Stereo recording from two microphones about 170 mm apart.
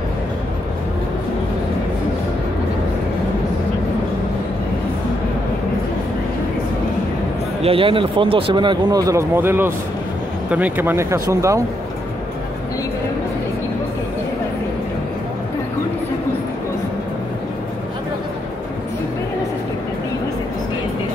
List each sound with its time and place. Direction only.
7.6 s speech: 30° right (ahead or behind)